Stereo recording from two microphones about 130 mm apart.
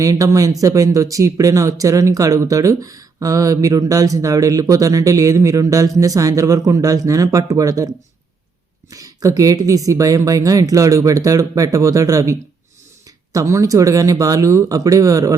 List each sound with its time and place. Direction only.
0.0 s speech: 25° right (ahead or behind)